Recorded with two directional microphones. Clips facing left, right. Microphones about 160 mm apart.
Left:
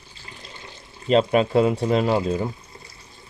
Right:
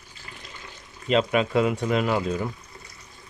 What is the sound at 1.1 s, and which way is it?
Speech, 35° left (ahead or behind).